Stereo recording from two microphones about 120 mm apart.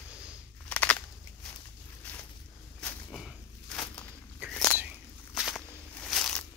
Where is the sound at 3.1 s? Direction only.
Centre (ahead or behind).